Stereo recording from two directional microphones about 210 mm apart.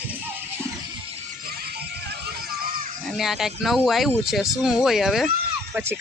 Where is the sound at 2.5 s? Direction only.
45° right (ahead or behind).